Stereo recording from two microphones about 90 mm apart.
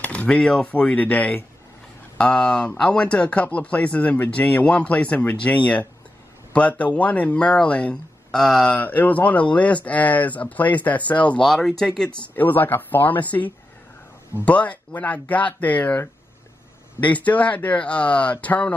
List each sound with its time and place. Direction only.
0.0 s speech: 15° left (ahead or behind)
7.0 s speech: 15° left (ahead or behind)
8.7 s speech: 20° left (ahead or behind)
11.4 s speech: centre (ahead or behind)
12.4 s speech: 20° left (ahead or behind)